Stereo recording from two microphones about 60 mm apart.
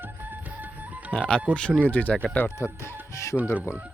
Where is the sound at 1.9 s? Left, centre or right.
Left.